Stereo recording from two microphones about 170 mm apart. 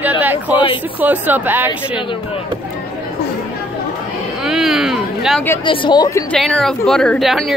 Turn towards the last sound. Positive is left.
turn(degrees=0)  # may be behind; listen again after turning